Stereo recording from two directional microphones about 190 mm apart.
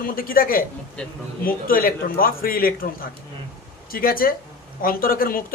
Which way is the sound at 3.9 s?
50° left (ahead or behind).